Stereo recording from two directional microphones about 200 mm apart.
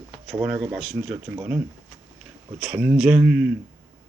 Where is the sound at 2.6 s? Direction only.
5° right (ahead or behind).